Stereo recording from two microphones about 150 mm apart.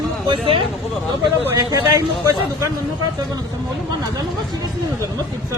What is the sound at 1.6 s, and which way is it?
A man's voice, 25° right (ahead or behind).